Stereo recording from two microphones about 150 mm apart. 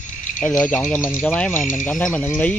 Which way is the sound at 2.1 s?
10° left (ahead or behind).